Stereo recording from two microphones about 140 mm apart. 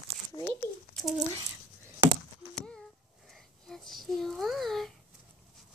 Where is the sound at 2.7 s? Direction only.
5° left (ahead or behind).